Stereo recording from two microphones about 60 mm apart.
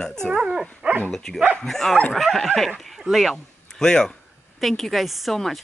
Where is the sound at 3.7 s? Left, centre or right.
Centre.